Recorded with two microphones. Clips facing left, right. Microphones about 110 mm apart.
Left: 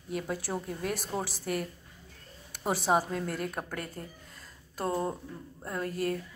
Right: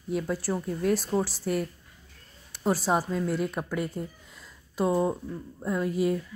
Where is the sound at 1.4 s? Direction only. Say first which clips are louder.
Right 4 dB; centre (ahead or behind).